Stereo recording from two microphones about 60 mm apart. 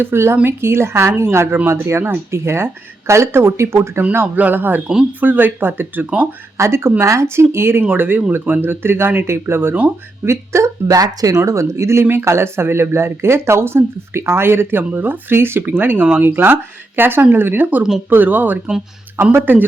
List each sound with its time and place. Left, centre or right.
0.0 s a woman's voice: right
4.4 s speech: right
6.6 s a woman's voice: right
10.2 s speech: right
11.3 s a woman's voice: right